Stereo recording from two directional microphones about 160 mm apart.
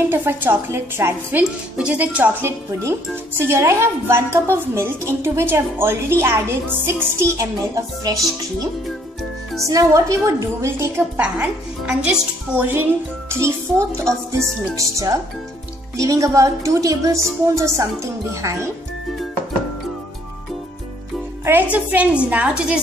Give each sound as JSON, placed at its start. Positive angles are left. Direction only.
{"t": 0.1, "sound": "a woman's voice", "side_deg": -15}
{"t": 9.7, "sound": "a woman's voice", "side_deg": -20}
{"t": 21.5, "sound": "a woman's voice", "side_deg": -10}